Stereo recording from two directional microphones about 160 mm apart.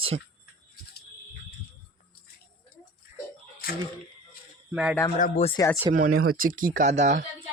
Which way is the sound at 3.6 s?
70° left (ahead or behind).